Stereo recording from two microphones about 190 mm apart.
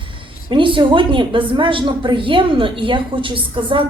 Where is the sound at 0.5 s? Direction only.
25° right (ahead or behind).